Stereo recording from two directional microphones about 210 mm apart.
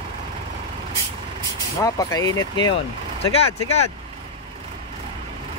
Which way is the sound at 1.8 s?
15° left (ahead or behind).